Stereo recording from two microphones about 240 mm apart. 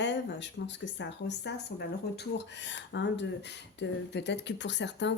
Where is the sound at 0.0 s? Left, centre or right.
Left.